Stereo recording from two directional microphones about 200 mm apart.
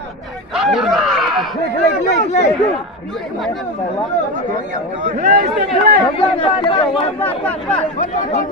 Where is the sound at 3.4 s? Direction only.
Centre (ahead or behind).